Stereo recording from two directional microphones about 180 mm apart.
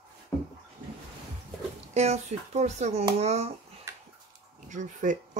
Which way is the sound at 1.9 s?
40° right (ahead or behind).